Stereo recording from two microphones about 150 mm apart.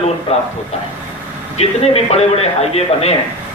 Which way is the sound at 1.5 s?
45° left (ahead or behind).